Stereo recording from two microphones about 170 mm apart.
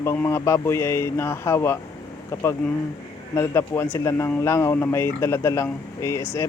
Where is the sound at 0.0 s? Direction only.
15° left (ahead or behind).